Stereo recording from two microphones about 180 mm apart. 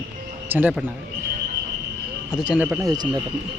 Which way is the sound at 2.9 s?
25° right (ahead or behind).